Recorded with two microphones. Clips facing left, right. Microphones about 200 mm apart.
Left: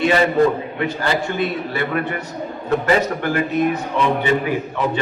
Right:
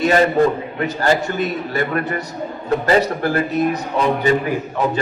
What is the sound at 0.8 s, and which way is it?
A man's voice, 45° right (ahead or behind).